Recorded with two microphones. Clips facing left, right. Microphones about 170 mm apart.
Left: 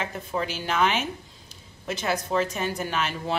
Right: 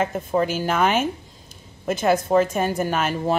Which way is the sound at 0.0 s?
50° right (ahead or behind).